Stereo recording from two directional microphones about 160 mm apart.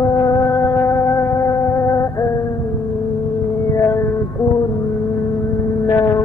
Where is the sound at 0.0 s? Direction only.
20° left (ahead or behind).